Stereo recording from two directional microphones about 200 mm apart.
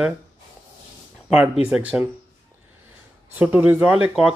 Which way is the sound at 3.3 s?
10° right (ahead or behind).